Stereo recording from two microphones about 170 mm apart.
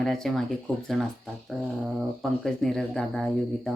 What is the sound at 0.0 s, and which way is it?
Speech, centre (ahead or behind).